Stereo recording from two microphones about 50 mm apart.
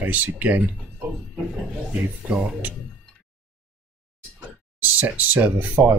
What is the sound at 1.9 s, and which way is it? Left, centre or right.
Speech, right.